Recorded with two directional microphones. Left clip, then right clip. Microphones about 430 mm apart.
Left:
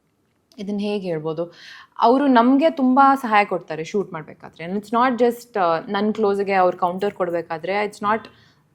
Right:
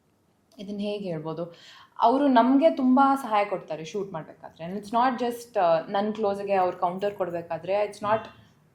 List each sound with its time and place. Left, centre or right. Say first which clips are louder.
0.5 s a woman's voice: left 6 dB; left